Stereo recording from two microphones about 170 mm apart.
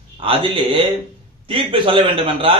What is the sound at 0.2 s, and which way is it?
A man's voice, 35° right (ahead or behind).